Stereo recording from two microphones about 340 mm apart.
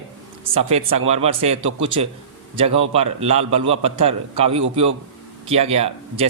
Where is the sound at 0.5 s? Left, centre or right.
Centre.